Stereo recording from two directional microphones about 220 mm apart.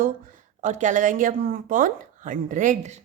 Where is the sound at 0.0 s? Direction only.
35° right (ahead or behind).